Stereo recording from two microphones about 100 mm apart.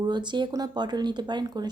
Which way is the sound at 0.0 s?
45° right (ahead or behind).